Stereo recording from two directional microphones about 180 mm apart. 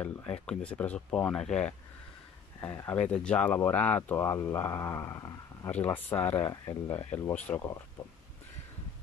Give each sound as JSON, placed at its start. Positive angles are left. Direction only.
{"t": 0.5, "sound": "speech", "side_deg": 5}
{"t": 7.3, "sound": "speech", "side_deg": 10}